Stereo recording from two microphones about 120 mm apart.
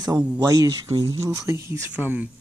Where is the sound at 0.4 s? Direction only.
35° right (ahead or behind); by 2.2 s 15° right (ahead or behind).